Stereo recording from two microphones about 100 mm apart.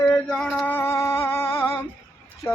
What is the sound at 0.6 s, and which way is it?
Music, 20° left (ahead or behind).